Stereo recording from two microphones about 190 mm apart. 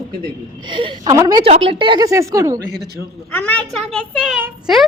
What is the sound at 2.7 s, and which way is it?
Speech, 55° right (ahead or behind).